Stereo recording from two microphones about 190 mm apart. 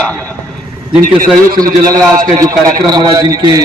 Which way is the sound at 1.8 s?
15° right (ahead or behind).